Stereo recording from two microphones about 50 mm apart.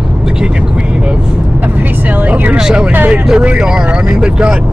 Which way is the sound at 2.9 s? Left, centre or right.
Right.